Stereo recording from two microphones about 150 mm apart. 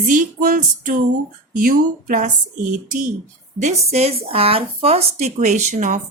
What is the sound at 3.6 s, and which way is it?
Speech, 50° right (ahead or behind).